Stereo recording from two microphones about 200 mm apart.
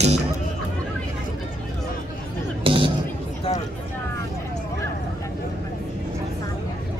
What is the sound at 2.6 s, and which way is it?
Music, 25° right (ahead or behind).